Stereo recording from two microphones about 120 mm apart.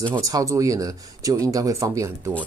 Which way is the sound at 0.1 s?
30° right (ahead or behind).